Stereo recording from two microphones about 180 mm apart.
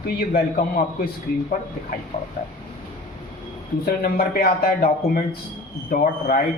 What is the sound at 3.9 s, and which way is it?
A man's voice, 55° left (ahead or behind).